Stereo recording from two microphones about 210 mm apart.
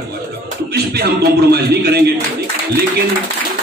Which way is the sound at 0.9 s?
50° right (ahead or behind).